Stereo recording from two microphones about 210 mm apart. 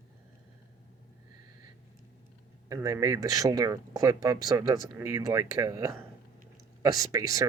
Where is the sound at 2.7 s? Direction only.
15° right (ahead or behind).